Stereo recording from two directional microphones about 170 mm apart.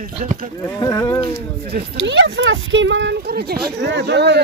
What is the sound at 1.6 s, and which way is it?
Speech, 65° right (ahead or behind).